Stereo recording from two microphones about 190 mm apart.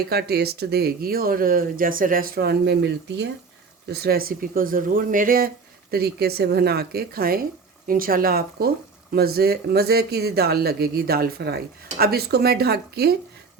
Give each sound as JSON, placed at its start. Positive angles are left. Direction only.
{"t": 0.1, "sound": "speech", "side_deg": -60}